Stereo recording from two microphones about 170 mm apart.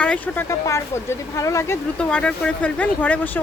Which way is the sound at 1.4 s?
15° left (ahead or behind).